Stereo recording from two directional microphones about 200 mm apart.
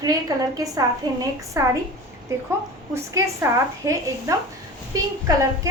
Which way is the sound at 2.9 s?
15° right (ahead or behind).